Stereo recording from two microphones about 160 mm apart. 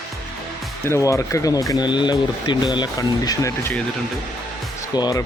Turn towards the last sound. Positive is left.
turn(degrees=25)  # may be behind; listen again after turning